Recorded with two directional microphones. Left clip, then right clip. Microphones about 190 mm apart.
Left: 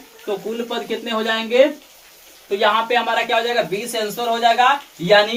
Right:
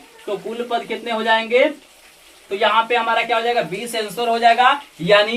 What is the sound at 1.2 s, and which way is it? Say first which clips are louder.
Speech: right 7 dB; centre (ahead or behind).